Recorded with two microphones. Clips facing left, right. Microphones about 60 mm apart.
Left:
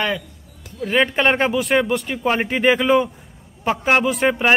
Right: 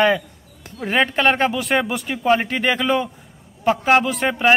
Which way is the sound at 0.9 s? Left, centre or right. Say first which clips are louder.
Even; centre.